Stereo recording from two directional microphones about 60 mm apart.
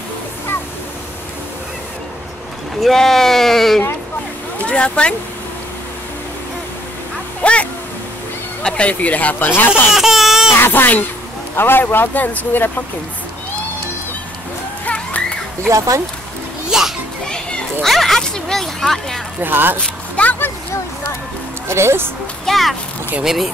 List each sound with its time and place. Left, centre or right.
2.8 s speech: centre
4.6 s speech: centre
7.4 s speech: centre
8.6 s speech: centre
9.9 s baby laughter: centre
10.6 s speech: left
15.7 s speech: right
16.6 s children playing: centre
17.8 s a sound: centre
19.4 s speech: right
20.2 s speech: centre
21.6 s speech: right
22.5 s baby laughter: centre